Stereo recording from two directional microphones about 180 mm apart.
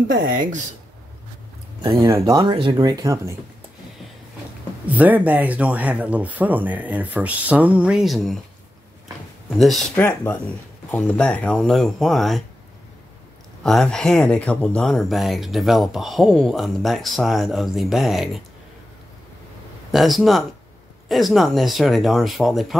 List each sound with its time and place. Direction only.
0.3 s speech: 45° right (ahead or behind)
1.8 s speech: 20° right (ahead or behind)
4.8 s speech: 10° right (ahead or behind)
9.6 s speech: centre (ahead or behind)
9.9 s speech: 10° left (ahead or behind)
13.7 s speech: centre (ahead or behind)
19.9 s speech: centre (ahead or behind)